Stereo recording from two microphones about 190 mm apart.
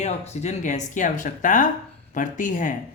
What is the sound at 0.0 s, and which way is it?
Speech, 40° left (ahead or behind).